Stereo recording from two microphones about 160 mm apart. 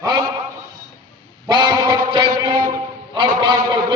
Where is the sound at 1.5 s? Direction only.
25° right (ahead or behind).